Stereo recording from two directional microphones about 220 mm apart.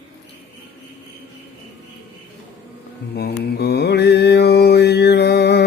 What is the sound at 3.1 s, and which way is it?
Mantra, 45° left (ahead or behind).